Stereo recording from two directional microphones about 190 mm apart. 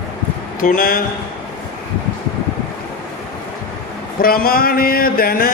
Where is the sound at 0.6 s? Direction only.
50° left (ahead or behind).